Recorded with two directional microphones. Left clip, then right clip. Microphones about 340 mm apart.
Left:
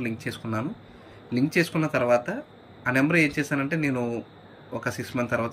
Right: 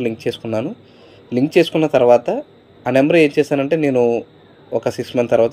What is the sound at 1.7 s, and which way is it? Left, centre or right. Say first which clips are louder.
Speech: right 11 dB; right.